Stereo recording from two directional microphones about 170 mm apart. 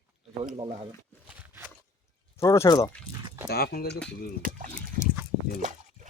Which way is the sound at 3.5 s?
70° left (ahead or behind).